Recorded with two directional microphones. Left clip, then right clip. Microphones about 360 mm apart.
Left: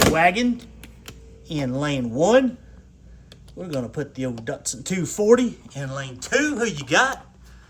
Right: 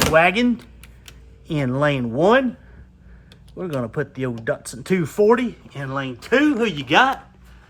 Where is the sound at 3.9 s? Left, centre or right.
Centre.